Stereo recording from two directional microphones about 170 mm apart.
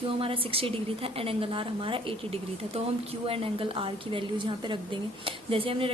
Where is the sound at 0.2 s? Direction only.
35° right (ahead or behind).